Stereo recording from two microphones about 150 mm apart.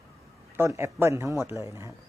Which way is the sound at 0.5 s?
15° right (ahead or behind).